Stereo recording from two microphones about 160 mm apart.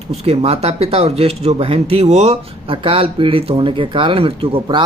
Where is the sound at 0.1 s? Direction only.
40° right (ahead or behind).